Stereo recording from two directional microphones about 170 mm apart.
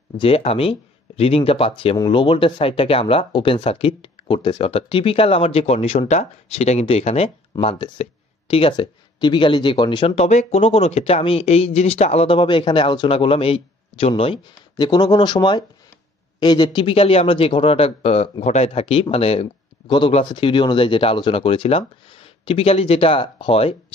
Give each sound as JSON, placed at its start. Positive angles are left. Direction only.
{"t": 0.2, "sound": "speech", "side_deg": 35}